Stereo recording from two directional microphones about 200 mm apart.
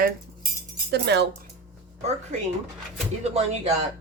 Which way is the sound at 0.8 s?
55° right (ahead or behind).